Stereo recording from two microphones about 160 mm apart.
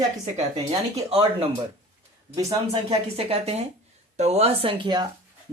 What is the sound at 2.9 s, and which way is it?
Speech, 40° right (ahead or behind).